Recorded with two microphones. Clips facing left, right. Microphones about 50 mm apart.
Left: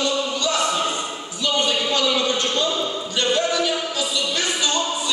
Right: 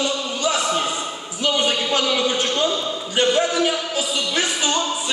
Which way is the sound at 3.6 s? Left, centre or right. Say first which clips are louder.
Right 2 dB; right.